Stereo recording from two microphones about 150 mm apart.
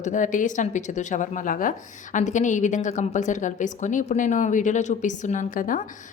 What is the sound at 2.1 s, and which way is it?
A woman's voice, 55° left (ahead or behind).